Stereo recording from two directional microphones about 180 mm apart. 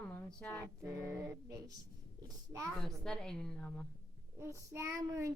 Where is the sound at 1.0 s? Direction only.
15° right (ahead or behind).